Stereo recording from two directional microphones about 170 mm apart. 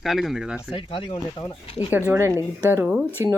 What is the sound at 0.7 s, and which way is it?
Speech, 30° left (ahead or behind).